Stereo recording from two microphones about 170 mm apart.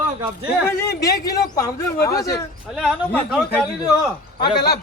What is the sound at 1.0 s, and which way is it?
Speech, 20° left (ahead or behind).